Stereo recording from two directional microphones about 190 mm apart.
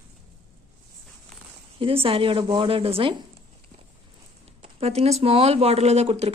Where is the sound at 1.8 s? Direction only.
30° right (ahead or behind).